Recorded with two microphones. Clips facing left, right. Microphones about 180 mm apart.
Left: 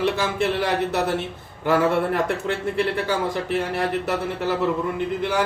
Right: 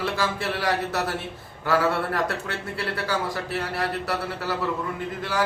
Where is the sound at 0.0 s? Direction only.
25° left (ahead or behind).